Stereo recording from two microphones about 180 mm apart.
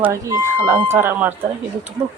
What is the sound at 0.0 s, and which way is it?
Speech, 15° right (ahead or behind).